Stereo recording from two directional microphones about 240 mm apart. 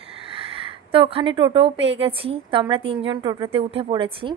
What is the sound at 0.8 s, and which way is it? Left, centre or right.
A woman's voice, right.